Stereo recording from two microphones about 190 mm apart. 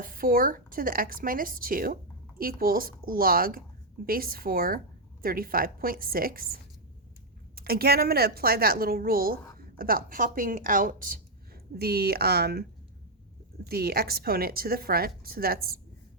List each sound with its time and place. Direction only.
0.0 s a woman's voice: 50° right (ahead or behind)
13.7 s a woman's voice: 55° right (ahead or behind)